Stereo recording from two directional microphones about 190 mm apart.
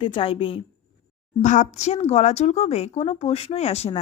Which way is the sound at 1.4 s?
40° left (ahead or behind).